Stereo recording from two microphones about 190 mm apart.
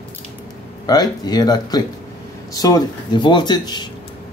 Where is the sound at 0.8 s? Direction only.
20° left (ahead or behind).